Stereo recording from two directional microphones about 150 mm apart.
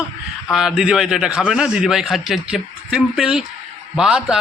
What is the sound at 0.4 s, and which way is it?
A man's voice, centre (ahead or behind).